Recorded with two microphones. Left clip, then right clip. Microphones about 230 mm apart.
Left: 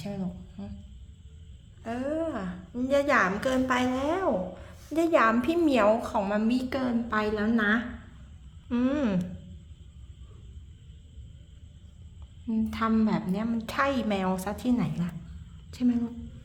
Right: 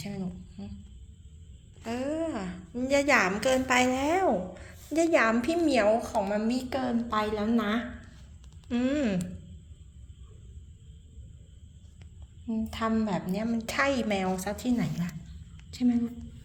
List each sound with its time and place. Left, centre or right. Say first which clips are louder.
0.0 s a sound: left 2 dB; centre
1.8 s a woman's voice: left 1 dB; centre
8.7 s a woman's voice: left 1 dB; centre
12.5 s a woman's voice: left 2 dB; centre